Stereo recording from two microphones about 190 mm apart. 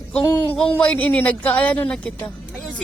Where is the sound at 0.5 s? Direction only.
5° left (ahead or behind).